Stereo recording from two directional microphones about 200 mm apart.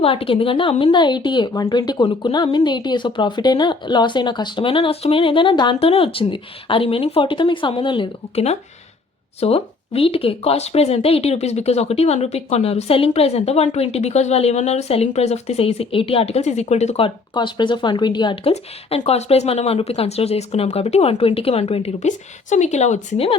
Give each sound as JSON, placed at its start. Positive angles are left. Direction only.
{"t": 0.0, "sound": "speech", "side_deg": 30}